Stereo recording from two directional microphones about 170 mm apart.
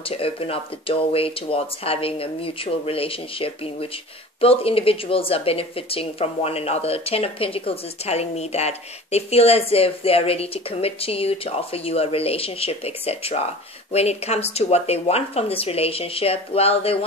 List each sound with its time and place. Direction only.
0.0 s speech: 35° left (ahead or behind)